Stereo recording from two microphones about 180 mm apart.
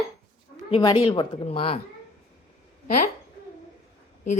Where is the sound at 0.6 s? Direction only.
30° left (ahead or behind).